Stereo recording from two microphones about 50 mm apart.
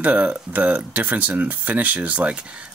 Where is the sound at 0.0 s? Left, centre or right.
Right.